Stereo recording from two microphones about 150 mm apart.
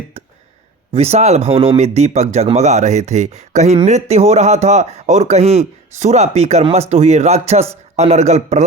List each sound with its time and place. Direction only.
0.9 s speech: 45° right (ahead or behind)